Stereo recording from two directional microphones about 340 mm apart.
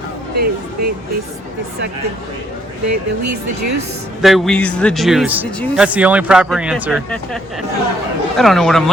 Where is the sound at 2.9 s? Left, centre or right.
Right.